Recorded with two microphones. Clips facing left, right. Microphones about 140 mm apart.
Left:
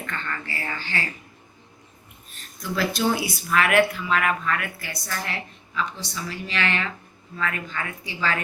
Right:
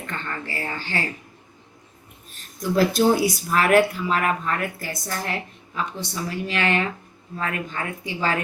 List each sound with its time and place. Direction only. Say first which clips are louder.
0.0 s a sound: even; 25° right (ahead or behind)
0.8 s speech: right 3 dB; 40° right (ahead or behind)
2.6 s speech: right 6 dB; 45° right (ahead or behind)